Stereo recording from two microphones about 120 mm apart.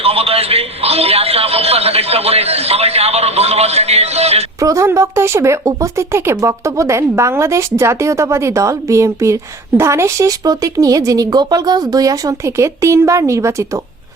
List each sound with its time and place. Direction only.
0.0 s a man's voice: 55° right (ahead or behind)
4.6 s speech: 25° right (ahead or behind)